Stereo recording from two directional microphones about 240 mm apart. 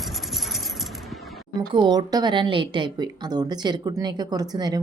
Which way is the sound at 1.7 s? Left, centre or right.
Centre.